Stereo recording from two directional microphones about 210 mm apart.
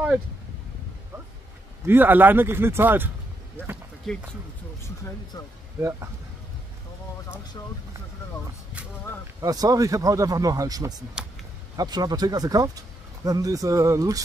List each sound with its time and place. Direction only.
1.9 s speech: 10° right (ahead or behind)
4.1 s speech: centre (ahead or behind)
4.8 s speech: 15° left (ahead or behind)
9.4 s speech: 15° right (ahead or behind)